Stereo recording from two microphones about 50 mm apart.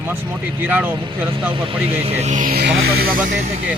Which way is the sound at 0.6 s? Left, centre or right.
Right.